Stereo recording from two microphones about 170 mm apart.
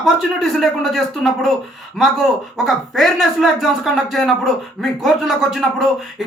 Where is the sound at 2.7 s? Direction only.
Centre (ahead or behind).